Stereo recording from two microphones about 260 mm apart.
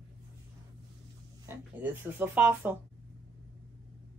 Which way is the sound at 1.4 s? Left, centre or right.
Centre.